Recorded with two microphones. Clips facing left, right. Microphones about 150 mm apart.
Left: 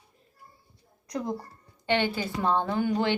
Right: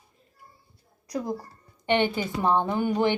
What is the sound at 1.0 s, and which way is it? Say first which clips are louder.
Speech: right 1 dB; 5° right (ahead or behind).